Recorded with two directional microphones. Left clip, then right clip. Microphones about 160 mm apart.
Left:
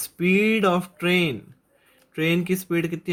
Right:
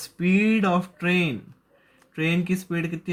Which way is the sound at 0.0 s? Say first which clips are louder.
Left 3 dB; 40° left (ahead or behind).